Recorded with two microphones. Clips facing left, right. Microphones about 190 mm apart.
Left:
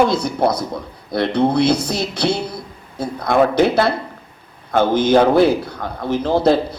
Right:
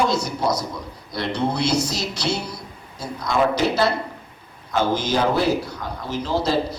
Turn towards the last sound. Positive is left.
turn(degrees=55)  # may be behind; listen again after turning